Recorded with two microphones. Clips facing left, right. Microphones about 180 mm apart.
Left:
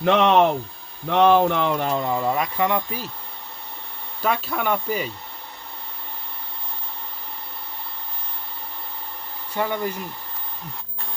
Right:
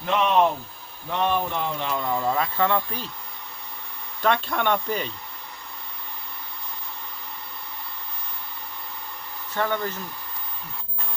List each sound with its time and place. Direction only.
0.0 s speech: 75° left (ahead or behind)
1.1 s speech: 90° left
1.9 s speech: 20° left (ahead or behind)
4.2 s speech: 5° left (ahead or behind)
9.6 s speech: 10° left (ahead or behind)